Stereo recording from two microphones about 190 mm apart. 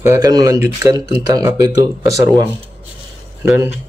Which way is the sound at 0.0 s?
20° right (ahead or behind).